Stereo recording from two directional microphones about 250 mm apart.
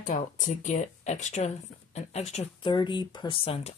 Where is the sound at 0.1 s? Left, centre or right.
Left.